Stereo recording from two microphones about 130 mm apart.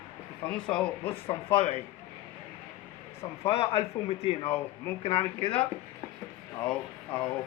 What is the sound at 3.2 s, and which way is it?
Speech, 45° left (ahead or behind).